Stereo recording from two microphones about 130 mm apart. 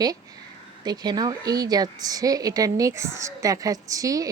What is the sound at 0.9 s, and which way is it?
A woman's voice, 30° right (ahead or behind).